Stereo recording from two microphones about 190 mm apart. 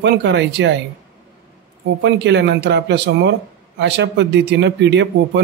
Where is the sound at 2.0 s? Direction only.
65° right (ahead or behind).